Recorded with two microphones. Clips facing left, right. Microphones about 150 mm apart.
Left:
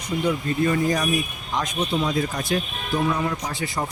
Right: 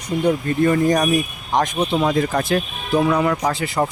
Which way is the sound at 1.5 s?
65° right (ahead or behind).